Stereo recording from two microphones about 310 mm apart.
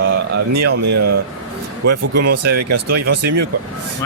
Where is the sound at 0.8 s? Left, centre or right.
Right.